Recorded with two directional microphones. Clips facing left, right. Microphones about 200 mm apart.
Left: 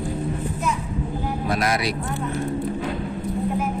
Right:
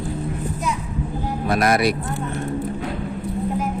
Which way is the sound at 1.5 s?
55° right (ahead or behind).